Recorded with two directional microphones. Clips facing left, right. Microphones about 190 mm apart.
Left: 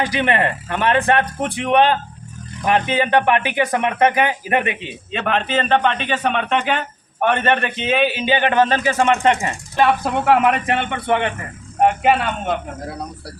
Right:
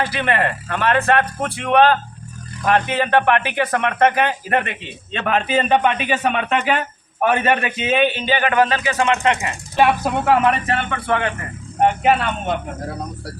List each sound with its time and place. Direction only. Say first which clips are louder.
0.0 s a man's voice: left 1 dB; 15° left (ahead or behind)
5.1 s a man's voice: right 1 dB; centre (ahead or behind)
8.2 s speech: left 2 dB; 20° left (ahead or behind)
8.4 s speech: even; 35° left (ahead or behind)
9.7 s speech: right 1 dB; 10° right (ahead or behind)
10.7 s speech: left 2 dB; 20° left (ahead or behind)
11.8 s a man's voice: even; 5° left (ahead or behind)